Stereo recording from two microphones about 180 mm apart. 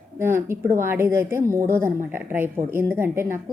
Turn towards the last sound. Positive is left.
turn(degrees=-15)  # may be behind; listen again after turning